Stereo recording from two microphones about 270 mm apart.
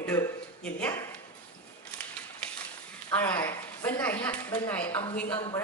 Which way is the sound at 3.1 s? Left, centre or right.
Centre.